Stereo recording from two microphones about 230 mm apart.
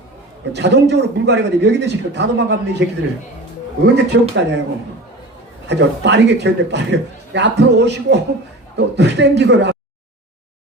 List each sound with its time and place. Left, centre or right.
0.5 s a man's voice: right
3.9 s a man's voice: right
5.6 s a man's voice: right